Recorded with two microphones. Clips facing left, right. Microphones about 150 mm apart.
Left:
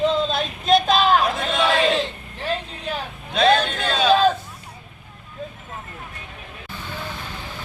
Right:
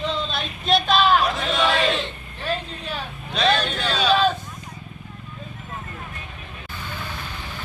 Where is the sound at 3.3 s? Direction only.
50° left (ahead or behind).